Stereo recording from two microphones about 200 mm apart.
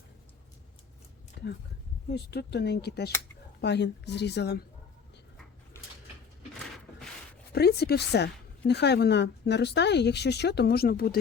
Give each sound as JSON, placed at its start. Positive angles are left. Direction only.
{"t": 2.0, "sound": "a woman's voice", "side_deg": 55}
{"t": 7.5, "sound": "a woman's voice", "side_deg": 55}